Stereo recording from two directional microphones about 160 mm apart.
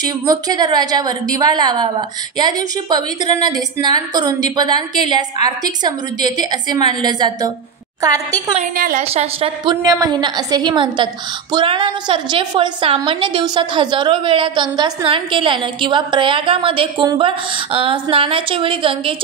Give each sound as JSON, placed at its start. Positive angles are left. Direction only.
{"t": 0.0, "sound": "a woman's voice", "side_deg": -25}
{"t": 8.7, "sound": "a woman's voice", "side_deg": -60}
{"t": 9.0, "sound": "a woman's voice", "side_deg": -40}
{"t": 9.8, "sound": "a woman's voice", "side_deg": -25}